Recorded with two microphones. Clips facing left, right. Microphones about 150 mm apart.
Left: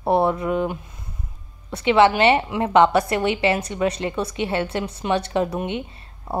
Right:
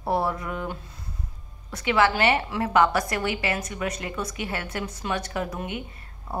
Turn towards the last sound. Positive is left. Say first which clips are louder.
# left 7 dB
turn(degrees=25)  # may be behind; listen again after turning